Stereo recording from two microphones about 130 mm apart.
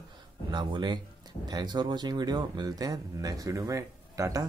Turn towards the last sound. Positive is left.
turn(degrees=-25)  # may be behind; listen again after turning